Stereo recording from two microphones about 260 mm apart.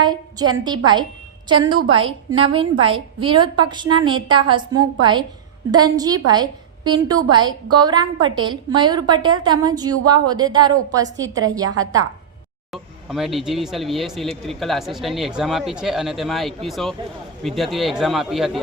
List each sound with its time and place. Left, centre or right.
0.0 s a woman's voice: centre
12.7 s speech: centre